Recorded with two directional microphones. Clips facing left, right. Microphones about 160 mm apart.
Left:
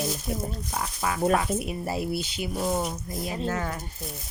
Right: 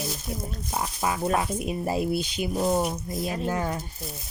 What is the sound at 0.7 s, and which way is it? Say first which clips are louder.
Speech: right 4 dB; 20° right (ahead or behind).